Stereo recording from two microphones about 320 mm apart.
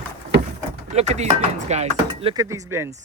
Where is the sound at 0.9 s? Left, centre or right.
Centre.